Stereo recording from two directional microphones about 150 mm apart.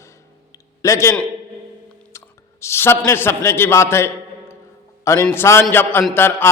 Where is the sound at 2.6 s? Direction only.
15° left (ahead or behind).